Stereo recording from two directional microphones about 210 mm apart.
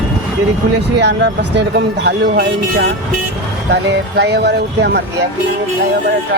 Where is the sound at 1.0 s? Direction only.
55° right (ahead or behind).